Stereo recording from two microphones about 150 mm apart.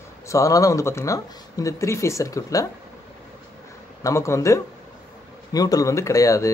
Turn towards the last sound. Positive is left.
turn(degrees=20)  # may be behind; listen again after turning